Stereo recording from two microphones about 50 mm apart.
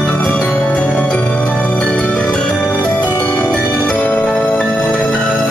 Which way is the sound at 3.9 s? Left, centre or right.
Left.